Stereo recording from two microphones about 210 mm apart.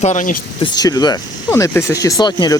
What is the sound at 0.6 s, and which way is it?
Speech, 20° left (ahead or behind).